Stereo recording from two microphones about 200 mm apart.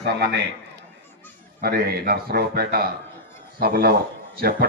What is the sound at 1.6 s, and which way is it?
A man's voice, 50° right (ahead or behind).